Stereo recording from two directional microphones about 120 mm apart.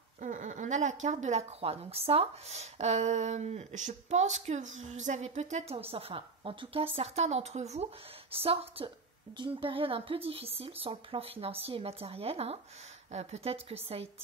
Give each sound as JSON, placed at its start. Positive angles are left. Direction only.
{"t": 0.2, "sound": "speech", "side_deg": -90}
{"t": 1.6, "sound": "speech", "side_deg": -55}
{"t": 5.8, "sound": "a woman's voice", "side_deg": -55}